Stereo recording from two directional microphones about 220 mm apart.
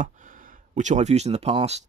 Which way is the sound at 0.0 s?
35° right (ahead or behind).